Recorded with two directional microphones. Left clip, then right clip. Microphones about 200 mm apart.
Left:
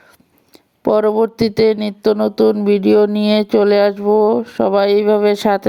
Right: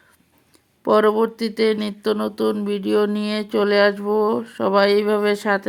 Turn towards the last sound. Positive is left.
turn(degrees=35)  # may be behind; listen again after turning